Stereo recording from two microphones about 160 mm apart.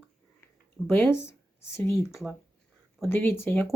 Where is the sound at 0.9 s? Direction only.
15° left (ahead or behind).